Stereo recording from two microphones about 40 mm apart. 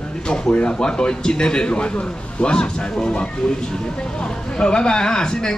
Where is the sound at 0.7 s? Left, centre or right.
Left.